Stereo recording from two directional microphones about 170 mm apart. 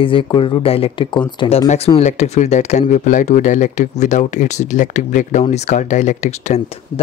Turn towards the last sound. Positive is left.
turn(degrees=40)  # may be behind; listen again after turning